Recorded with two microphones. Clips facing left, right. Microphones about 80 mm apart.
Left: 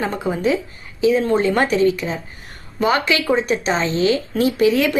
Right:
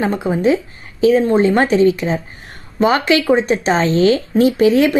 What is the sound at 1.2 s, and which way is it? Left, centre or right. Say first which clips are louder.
A woman's voice: right 4 dB; right.